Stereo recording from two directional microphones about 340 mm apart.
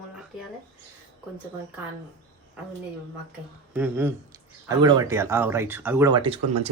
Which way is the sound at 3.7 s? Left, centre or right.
Centre.